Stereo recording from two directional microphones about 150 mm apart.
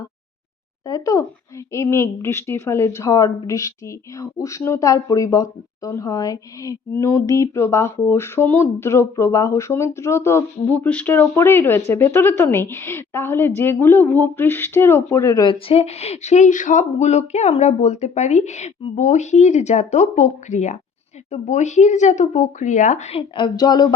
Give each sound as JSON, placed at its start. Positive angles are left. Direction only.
{"t": 0.9, "sound": "speech", "side_deg": 25}
{"t": 15.4, "sound": "speech", "side_deg": 40}